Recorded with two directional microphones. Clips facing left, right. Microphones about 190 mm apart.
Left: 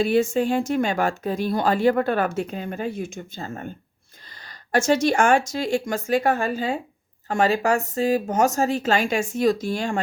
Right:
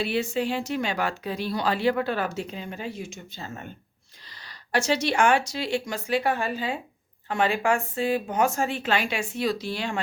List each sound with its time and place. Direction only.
0.0 s a woman's voice: 45° left (ahead or behind)